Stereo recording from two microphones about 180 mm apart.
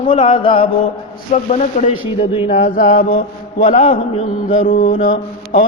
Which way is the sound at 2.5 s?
45° left (ahead or behind).